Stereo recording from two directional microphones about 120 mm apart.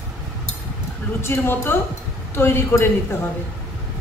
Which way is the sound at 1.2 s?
20° left (ahead or behind).